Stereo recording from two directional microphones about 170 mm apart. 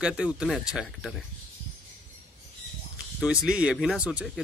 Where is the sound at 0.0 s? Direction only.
5° right (ahead or behind).